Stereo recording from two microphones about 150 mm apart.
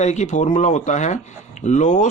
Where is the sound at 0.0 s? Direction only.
50° left (ahead or behind).